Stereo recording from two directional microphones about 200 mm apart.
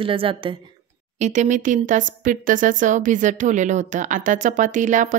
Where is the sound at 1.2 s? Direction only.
35° right (ahead or behind).